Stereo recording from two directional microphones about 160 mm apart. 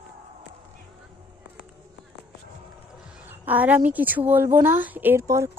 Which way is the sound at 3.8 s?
10° right (ahead or behind).